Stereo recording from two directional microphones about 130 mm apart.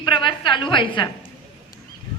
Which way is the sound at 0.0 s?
40° left (ahead or behind).